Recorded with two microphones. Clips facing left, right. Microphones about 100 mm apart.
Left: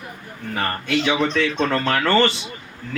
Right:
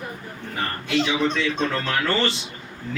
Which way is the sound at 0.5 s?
60° left (ahead or behind).